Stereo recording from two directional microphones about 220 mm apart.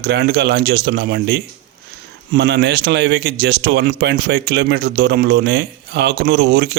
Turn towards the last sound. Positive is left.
turn(degrees=-45)  # may be behind; listen again after turning